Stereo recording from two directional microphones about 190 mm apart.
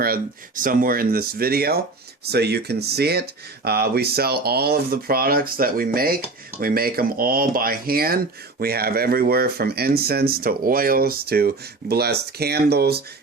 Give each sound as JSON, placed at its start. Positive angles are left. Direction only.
{"t": 0.0, "sound": "speech", "side_deg": -50}